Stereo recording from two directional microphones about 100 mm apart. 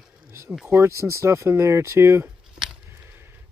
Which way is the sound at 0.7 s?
30° right (ahead or behind).